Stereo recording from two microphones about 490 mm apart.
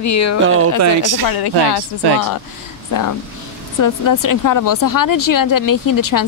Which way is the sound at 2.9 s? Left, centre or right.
Left.